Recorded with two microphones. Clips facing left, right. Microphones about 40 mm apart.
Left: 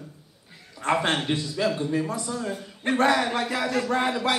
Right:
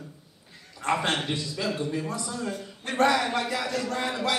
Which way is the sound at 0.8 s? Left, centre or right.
Centre.